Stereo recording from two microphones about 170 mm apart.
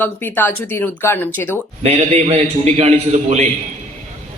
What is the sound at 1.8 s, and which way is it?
A man's voice, 40° right (ahead or behind).